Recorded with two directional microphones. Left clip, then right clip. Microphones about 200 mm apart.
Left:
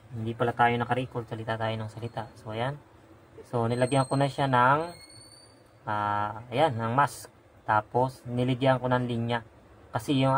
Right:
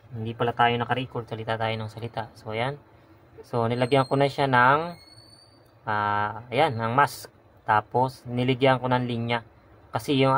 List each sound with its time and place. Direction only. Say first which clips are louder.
0.4 s speech: right 2 dB; 15° right (ahead or behind)